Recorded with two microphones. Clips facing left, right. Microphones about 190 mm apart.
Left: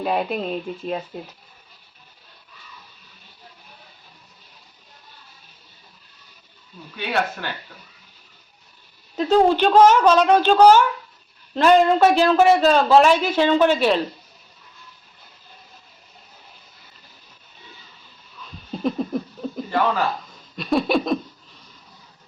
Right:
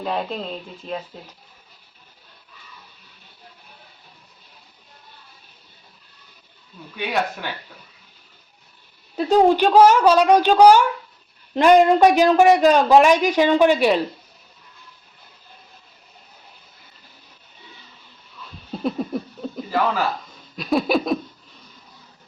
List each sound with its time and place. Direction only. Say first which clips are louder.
0.0 s speech: left 3 dB; 10° left (ahead or behind)
6.9 s speech: even; 15° right (ahead or behind)
9.1 s speech: right 1 dB; 15° right (ahead or behind)
18.7 s a sound: left 1 dB; 5° right (ahead or behind)